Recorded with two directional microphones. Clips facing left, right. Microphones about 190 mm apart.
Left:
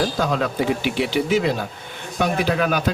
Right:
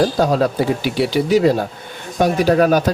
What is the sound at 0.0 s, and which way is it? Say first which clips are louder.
Speech: right 6 dB; 40° right (ahead or behind).